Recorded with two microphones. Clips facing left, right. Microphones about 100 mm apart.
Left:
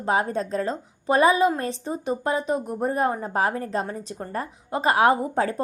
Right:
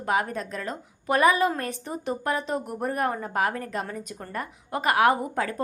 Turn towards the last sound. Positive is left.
turn(degrees=25)  # may be behind; listen again after turning